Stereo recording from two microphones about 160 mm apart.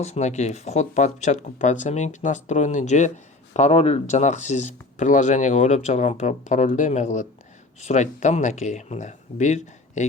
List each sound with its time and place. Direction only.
0.0 s speech: 45° left (ahead or behind)